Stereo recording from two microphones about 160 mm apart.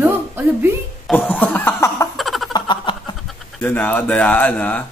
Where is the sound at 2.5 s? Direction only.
30° left (ahead or behind).